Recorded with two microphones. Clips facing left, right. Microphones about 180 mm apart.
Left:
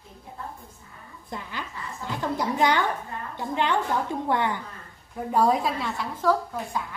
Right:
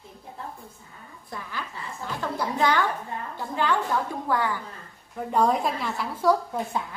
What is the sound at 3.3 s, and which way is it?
A woman's voice, 20° left (ahead or behind).